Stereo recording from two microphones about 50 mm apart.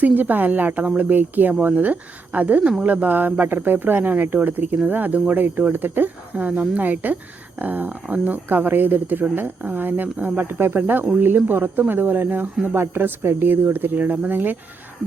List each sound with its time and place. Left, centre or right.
0.0 s speech: right
1.0 s speech: right
5.7 s speech: right
6.3 s speech: right
10.4 s speech: right